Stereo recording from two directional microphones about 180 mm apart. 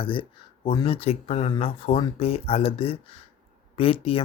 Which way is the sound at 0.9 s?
35° left (ahead or behind).